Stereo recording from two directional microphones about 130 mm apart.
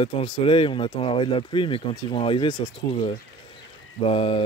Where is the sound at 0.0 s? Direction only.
40° left (ahead or behind).